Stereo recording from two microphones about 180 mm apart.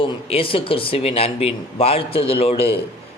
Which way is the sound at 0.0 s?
30° left (ahead or behind).